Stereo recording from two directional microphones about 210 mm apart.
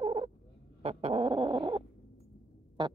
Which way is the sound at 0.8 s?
30° right (ahead or behind).